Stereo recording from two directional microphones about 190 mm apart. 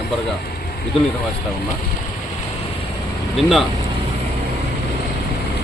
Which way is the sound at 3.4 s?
Centre (ahead or behind).